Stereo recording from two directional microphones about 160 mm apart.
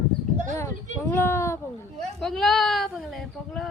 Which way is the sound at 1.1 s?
15° left (ahead or behind).